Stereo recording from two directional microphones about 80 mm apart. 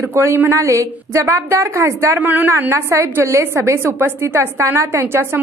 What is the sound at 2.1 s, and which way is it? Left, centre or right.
A woman's voice, right.